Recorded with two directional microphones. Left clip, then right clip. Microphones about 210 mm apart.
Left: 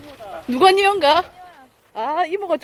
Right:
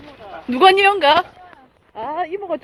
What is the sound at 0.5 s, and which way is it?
Speech, 10° left (ahead or behind).